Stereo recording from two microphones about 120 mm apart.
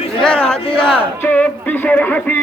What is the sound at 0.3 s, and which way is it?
Speech, 50° left (ahead or behind).